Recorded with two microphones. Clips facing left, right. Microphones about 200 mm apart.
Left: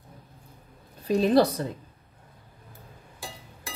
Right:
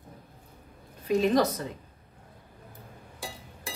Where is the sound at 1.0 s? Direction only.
35° left (ahead or behind).